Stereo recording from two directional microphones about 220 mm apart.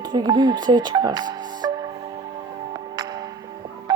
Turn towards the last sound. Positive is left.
turn(degrees=-20)  # may be behind; listen again after turning